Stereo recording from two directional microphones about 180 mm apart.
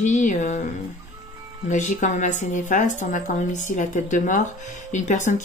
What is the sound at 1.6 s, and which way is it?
Speech, 45° left (ahead or behind).